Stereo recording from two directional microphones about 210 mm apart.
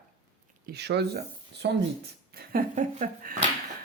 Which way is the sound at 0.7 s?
55° right (ahead or behind).